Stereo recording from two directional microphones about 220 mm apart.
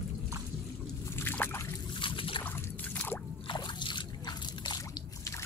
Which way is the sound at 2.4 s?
10° left (ahead or behind).